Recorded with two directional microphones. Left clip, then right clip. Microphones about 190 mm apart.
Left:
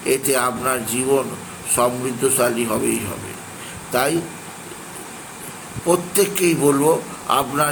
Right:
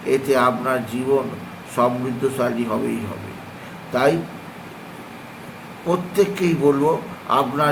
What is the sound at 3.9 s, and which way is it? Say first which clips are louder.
Speech: right 2 dB; 20° left (ahead or behind).